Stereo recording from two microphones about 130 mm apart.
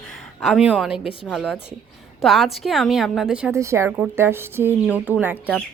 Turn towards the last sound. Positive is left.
turn(degrees=-15)  # may be behind; listen again after turning